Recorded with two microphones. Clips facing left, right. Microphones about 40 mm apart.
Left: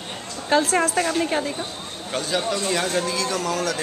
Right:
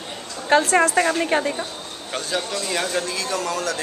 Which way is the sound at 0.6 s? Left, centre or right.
Centre.